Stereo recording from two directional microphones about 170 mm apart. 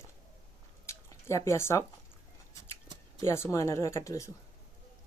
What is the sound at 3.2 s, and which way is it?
Speech, 15° left (ahead or behind).